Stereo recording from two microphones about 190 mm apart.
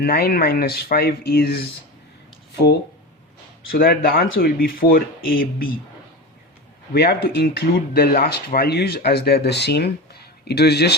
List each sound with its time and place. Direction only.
0.0 s speech: 55° left (ahead or behind)
3.7 s speech: 50° left (ahead or behind)
6.9 s speech: 55° left (ahead or behind)